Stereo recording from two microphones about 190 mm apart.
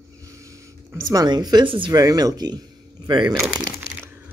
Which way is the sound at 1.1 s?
20° right (ahead or behind).